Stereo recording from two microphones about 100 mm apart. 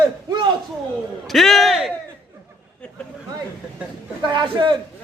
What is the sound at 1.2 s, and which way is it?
Speech, centre (ahead or behind).